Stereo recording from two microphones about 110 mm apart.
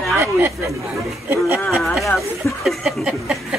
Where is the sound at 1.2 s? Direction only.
15° right (ahead or behind).